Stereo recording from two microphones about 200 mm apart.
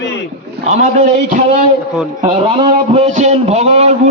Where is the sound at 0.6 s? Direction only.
35° right (ahead or behind).